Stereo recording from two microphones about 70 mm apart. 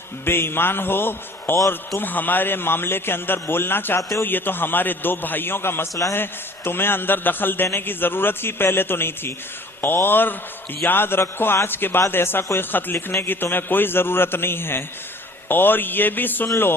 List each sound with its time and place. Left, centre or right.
0.3 s a man's voice: left